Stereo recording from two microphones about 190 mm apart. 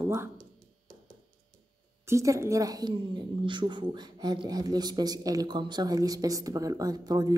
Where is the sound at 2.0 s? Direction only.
15° right (ahead or behind).